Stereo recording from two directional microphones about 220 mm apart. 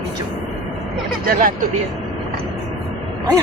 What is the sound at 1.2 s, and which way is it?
Speech, 40° right (ahead or behind).